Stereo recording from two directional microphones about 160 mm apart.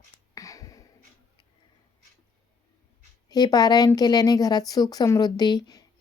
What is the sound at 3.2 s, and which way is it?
A woman's voice, 25° left (ahead or behind).